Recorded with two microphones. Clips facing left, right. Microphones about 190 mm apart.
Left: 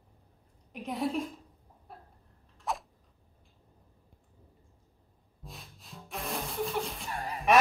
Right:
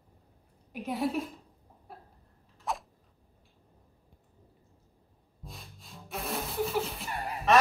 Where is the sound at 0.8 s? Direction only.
5° right (ahead or behind).